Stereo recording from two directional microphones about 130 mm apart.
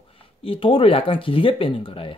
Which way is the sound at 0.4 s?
45° left (ahead or behind).